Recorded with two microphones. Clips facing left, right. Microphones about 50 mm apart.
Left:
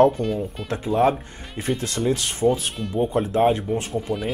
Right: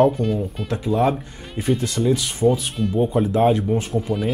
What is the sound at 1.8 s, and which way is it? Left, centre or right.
Speech, left.